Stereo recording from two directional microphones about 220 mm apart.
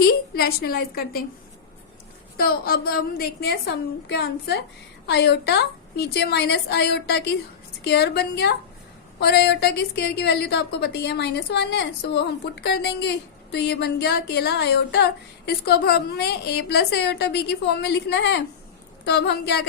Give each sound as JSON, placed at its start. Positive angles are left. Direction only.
{"t": 0.0, "sound": "a woman's voice", "side_deg": 45}
{"t": 2.4, "sound": "a woman's voice", "side_deg": 45}